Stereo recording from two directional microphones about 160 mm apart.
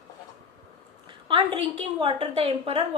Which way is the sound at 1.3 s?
35° right (ahead or behind).